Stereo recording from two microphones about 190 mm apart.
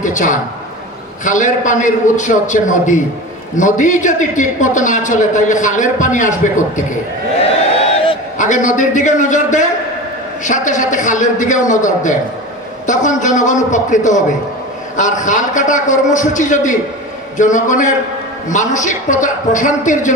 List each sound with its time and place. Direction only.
0.0 s a man's voice: 40° left (ahead or behind)
8.4 s a man's voice: 40° left (ahead or behind)